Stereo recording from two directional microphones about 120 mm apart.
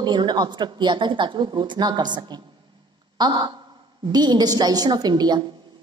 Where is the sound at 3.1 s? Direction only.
35° right (ahead or behind).